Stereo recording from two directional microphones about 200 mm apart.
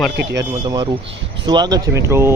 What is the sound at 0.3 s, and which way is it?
Speech, 20° right (ahead or behind).